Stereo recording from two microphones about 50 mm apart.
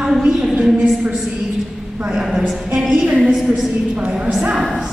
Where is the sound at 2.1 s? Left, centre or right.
Centre.